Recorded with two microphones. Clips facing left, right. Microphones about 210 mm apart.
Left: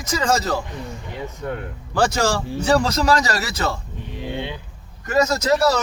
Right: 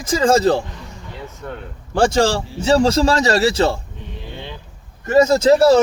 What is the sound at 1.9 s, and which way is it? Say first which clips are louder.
Speech: right 4 dB; 25° right (ahead or behind).